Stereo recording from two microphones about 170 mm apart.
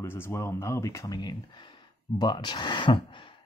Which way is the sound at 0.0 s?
15° left (ahead or behind).